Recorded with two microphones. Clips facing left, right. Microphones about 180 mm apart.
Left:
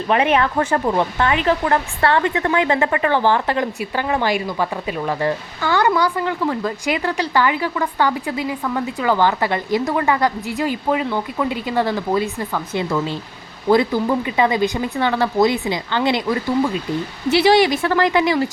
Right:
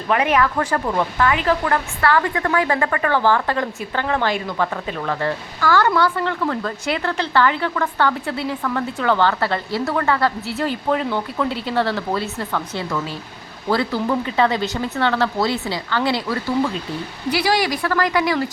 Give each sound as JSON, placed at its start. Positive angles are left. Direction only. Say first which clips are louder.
{"t": 0.1, "sound": "speech", "louder": "left 1 dB", "side_deg": 25}